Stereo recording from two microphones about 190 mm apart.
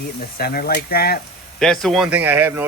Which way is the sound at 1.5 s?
Centre (ahead or behind).